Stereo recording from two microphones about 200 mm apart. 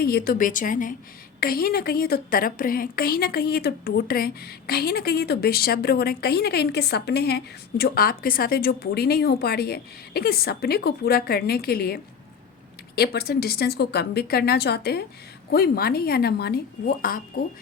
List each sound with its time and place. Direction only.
0.0 s a woman's voice: 50° left (ahead or behind)
13.0 s a woman's voice: 50° left (ahead or behind)